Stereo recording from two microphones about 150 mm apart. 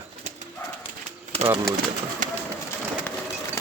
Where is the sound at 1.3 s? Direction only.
40° right (ahead or behind).